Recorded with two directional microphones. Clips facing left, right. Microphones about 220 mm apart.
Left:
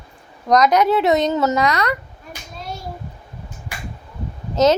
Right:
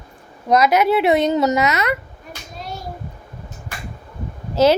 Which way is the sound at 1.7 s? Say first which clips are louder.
Even; 25° right (ahead or behind).